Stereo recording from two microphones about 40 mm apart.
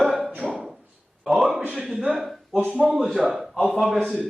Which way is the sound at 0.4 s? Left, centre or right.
Centre.